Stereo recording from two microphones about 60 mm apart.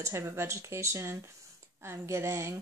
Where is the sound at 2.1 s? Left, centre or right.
Right.